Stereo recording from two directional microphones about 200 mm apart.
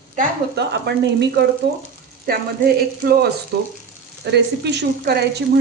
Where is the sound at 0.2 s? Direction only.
55° right (ahead or behind).